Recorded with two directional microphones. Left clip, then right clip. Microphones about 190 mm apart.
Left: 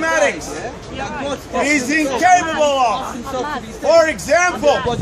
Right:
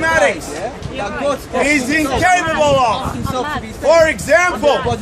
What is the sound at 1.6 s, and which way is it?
A man's voice, 10° right (ahead or behind).